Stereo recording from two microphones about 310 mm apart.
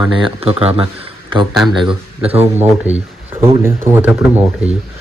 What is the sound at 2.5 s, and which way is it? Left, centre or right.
Speech, centre.